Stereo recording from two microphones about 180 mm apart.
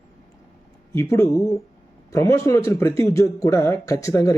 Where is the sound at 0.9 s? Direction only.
15° left (ahead or behind).